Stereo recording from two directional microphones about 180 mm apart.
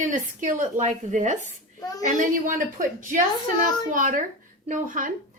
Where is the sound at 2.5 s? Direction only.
45° right (ahead or behind).